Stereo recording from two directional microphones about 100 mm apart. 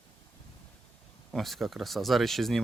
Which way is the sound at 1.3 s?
Centre (ahead or behind).